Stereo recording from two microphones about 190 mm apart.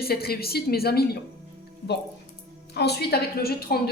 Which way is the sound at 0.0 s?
55° left (ahead or behind).